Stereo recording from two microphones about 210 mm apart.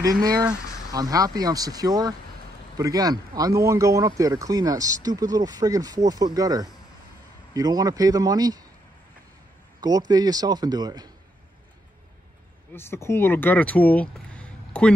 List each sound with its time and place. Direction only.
0.2 s speech: 15° right (ahead or behind)
9.8 s a man's voice: 20° right (ahead or behind)
12.7 s speech: 10° left (ahead or behind)
14.3 s a sound: 5° left (ahead or behind)